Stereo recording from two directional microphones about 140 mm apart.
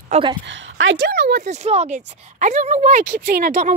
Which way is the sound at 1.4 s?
55° right (ahead or behind).